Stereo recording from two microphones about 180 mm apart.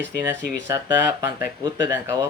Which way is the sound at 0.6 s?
15° right (ahead or behind).